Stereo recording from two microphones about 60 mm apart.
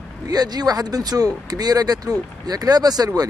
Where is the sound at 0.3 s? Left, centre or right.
Right.